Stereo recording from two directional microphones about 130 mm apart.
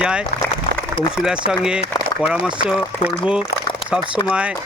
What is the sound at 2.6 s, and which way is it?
Speech, 45° left (ahead or behind).